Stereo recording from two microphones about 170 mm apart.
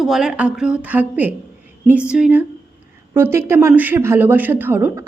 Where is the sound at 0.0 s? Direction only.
5° right (ahead or behind).